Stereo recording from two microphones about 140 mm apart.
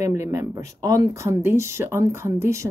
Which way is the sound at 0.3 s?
20° right (ahead or behind).